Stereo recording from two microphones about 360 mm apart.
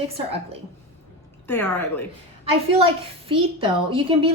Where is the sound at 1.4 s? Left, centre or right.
Centre.